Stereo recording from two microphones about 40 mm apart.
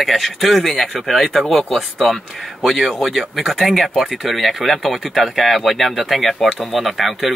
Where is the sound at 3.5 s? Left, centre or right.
Centre.